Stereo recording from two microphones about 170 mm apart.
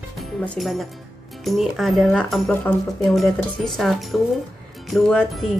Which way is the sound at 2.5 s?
10° left (ahead or behind).